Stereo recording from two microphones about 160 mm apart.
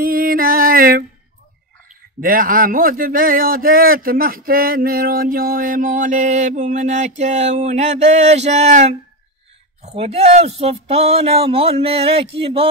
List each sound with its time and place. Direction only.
0.0 s mantra: 65° right (ahead or behind)
2.1 s a man's voice: 60° right (ahead or behind)
7.2 s a sound: 45° right (ahead or behind)
9.8 s speech: 40° right (ahead or behind)